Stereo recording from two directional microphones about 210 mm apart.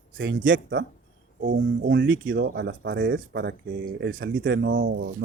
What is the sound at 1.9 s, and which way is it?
Speech, 60° right (ahead or behind).